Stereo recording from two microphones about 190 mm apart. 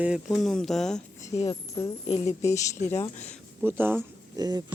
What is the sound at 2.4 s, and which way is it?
Speech, 15° left (ahead or behind).